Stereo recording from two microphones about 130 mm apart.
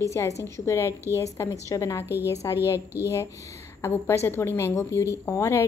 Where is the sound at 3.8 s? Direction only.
20° left (ahead or behind).